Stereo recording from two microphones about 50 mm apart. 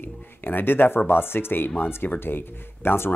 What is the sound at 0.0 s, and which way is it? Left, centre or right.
Speech, left.